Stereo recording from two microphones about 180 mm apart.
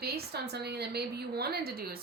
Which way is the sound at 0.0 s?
65° right (ahead or behind).